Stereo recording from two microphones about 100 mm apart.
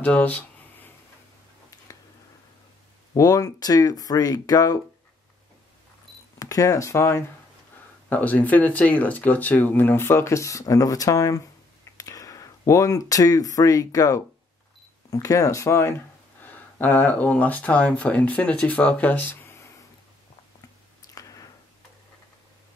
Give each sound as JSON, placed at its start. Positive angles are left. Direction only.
{"t": 0.0, "sound": "a sound", "side_deg": 15}
{"t": 3.2, "sound": "speech", "side_deg": 35}
{"t": 6.4, "sound": "speech", "side_deg": 35}
{"t": 8.1, "sound": "speech", "side_deg": 15}
{"t": 16.7, "sound": "speech", "side_deg": 15}
{"t": 21.1, "sound": "a sound", "side_deg": 35}